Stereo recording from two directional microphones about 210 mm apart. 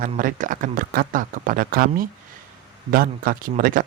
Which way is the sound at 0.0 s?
40° right (ahead or behind).